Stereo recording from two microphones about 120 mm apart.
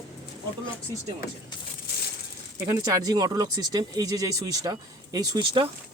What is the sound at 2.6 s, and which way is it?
Speech, 30° right (ahead or behind).